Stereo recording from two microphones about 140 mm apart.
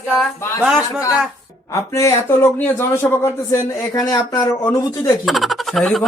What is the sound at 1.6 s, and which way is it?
A man's voice, 20° left (ahead or behind).